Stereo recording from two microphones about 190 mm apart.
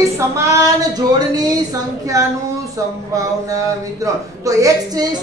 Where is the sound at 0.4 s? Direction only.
15° right (ahead or behind).